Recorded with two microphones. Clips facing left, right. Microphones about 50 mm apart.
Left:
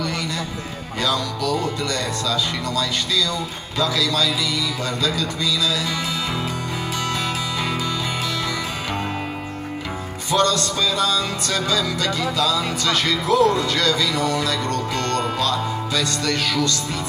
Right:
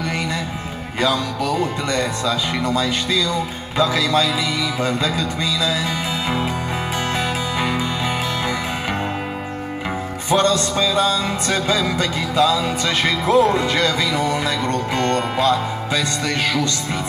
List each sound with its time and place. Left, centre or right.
1.0 s music: right
10.3 s music: right